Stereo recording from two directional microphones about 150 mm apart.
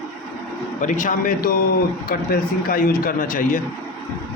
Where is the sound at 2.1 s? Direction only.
75° left (ahead or behind).